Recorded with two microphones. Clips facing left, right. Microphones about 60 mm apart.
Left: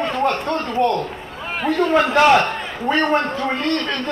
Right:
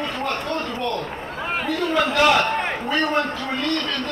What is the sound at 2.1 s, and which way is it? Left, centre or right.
Speech, left.